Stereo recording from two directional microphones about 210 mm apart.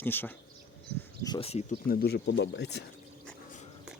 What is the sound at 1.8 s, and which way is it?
Speech, 45° left (ahead or behind).